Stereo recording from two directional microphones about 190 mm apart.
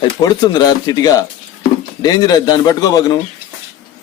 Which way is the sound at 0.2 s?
20° left (ahead or behind).